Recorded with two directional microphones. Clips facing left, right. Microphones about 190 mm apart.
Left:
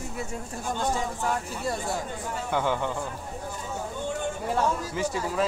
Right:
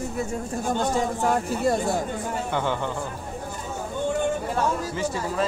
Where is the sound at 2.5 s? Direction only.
5° left (ahead or behind).